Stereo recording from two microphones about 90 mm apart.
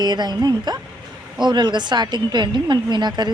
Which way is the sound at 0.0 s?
50° right (ahead or behind).